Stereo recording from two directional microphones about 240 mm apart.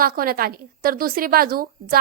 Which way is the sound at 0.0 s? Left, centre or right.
Right.